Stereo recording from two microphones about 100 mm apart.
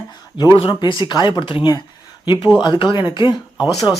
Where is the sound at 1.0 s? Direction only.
50° left (ahead or behind).